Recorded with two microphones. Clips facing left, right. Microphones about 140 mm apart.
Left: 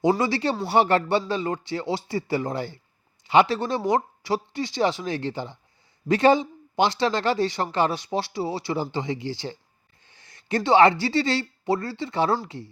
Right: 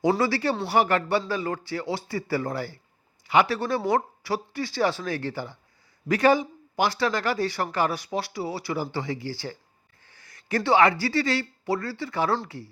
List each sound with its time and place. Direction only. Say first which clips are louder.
0.2 s a man's voice: even; 20° left (ahead or behind)